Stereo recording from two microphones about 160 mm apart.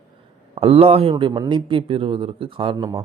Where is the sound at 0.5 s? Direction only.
40° right (ahead or behind).